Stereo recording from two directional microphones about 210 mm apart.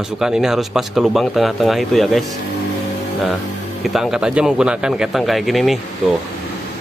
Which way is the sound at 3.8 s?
Centre (ahead or behind).